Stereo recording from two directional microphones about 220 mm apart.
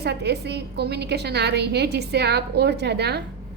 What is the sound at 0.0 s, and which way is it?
A woman's voice, 50° right (ahead or behind).